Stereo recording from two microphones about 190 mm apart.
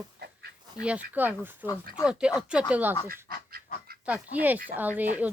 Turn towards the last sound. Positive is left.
turn(degrees=-10)  # may be behind; listen again after turning